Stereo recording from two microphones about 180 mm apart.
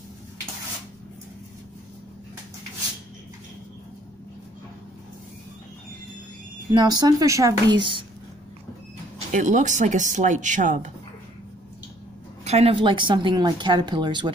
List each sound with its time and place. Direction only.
6.7 s speech: 20° right (ahead or behind)
9.3 s speech: 45° right (ahead or behind)
12.4 s speech: 35° right (ahead or behind)